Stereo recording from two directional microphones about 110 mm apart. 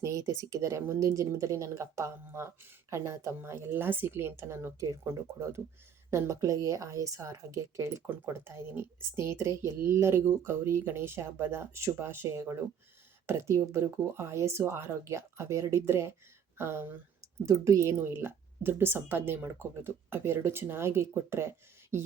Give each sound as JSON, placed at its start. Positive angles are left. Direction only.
{"t": 0.0, "sound": "a woman's voice", "side_deg": -30}